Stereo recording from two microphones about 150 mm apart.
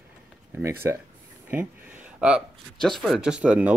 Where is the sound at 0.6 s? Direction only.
15° right (ahead or behind).